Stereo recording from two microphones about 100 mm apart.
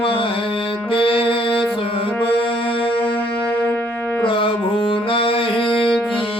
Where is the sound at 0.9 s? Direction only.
65° left (ahead or behind).